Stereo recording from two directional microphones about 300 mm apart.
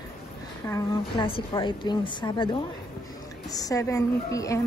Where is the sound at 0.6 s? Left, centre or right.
Centre.